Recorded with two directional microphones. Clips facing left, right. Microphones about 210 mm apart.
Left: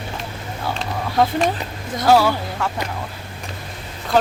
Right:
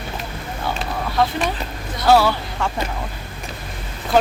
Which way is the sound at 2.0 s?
10° left (ahead or behind).